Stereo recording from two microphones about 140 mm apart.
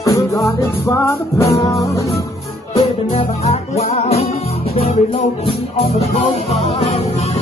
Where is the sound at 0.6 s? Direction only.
20° left (ahead or behind).